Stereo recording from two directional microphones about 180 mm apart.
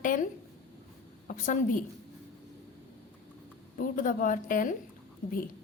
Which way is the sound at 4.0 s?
45° left (ahead or behind).